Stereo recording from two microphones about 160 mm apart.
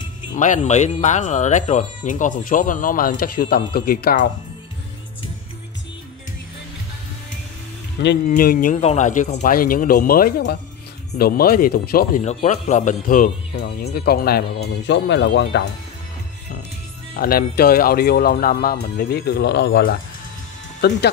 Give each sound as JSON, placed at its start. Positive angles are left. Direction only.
{"t": 0.4, "sound": "speech", "side_deg": 50}
{"t": 8.3, "sound": "speech", "side_deg": 60}
{"t": 8.8, "sound": "speech", "side_deg": 50}
{"t": 11.1, "sound": "speech", "side_deg": 70}
{"t": 12.2, "sound": "speech", "side_deg": 40}
{"t": 17.1, "sound": "speech", "side_deg": 65}